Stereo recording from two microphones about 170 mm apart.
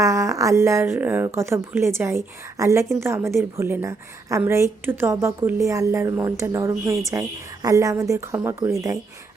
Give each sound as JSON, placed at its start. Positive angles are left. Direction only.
{"t": 0.0, "sound": "speech", "side_deg": -20}